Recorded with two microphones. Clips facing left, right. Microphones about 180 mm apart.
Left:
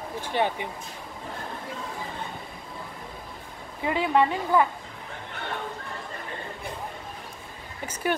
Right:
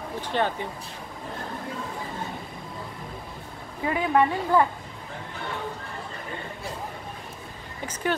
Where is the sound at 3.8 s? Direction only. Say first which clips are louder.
Even; 20° left (ahead or behind).